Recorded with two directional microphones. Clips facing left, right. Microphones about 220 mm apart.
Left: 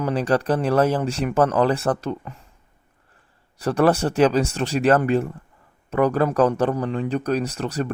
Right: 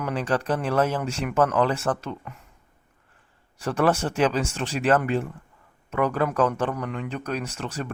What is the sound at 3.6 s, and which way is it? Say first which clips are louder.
Speech: left 4 dB; 35° left (ahead or behind).